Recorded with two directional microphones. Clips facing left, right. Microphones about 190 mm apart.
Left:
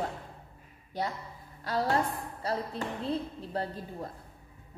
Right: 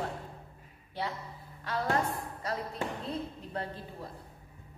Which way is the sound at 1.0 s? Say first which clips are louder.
Left 2 dB; 45° left (ahead or behind).